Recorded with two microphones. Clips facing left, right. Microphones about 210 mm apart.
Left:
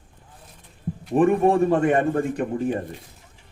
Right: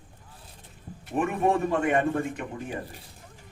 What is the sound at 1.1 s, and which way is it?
A man's voice, 35° left (ahead or behind).